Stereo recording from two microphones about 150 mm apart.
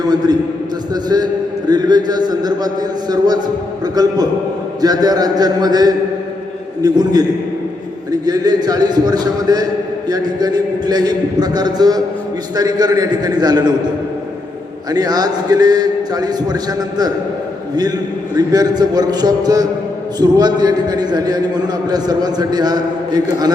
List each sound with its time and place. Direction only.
0.0 s a man's voice: 25° right (ahead or behind)
18.3 s a man's voice: 25° right (ahead or behind)